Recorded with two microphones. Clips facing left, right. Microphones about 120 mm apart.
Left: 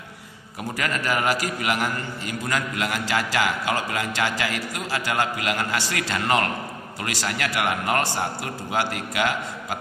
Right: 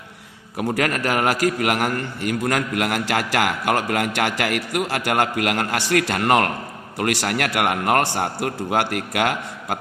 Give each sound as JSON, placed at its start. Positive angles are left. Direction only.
{"t": 0.6, "sound": "a man's voice", "side_deg": -60}